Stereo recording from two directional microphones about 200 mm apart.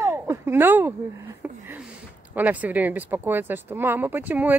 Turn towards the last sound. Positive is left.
turn(degrees=-10)  # may be behind; listen again after turning